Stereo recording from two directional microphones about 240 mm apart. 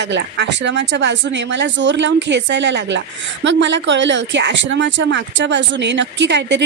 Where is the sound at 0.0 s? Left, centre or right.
Right.